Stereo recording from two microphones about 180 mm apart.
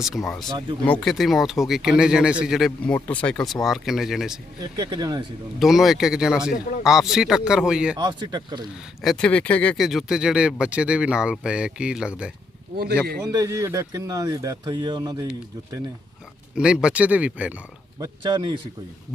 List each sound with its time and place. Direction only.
0.3 s speech: centre (ahead or behind)
4.6 s speech: 25° right (ahead or behind)
5.5 s speech: centre (ahead or behind)
7.9 s speech: 25° right (ahead or behind)
9.0 s speech: 5° left (ahead or behind)
13.3 s speech: 20° right (ahead or behind)
16.6 s speech: 5° right (ahead or behind)
18.0 s speech: 25° right (ahead or behind)